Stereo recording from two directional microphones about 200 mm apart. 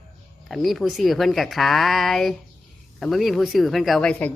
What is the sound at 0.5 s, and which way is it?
Speech, centre (ahead or behind).